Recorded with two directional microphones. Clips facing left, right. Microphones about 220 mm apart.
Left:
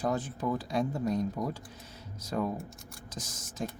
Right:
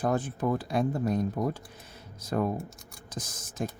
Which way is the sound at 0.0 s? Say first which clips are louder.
Right 3 dB; 55° right (ahead or behind).